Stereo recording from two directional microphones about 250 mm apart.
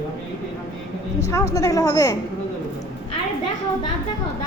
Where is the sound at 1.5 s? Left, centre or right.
Centre.